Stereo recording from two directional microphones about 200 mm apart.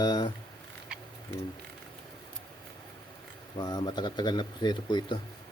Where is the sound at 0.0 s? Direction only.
20° left (ahead or behind).